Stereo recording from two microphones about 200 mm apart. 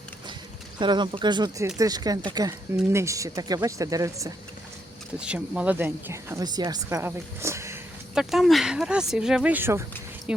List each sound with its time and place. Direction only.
0.8 s speech: 25° right (ahead or behind)
5.2 s speech: 5° right (ahead or behind)
8.1 s speech: centre (ahead or behind)